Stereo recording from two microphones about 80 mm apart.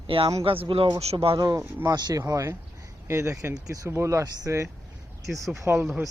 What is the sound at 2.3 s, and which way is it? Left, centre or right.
Speech, right.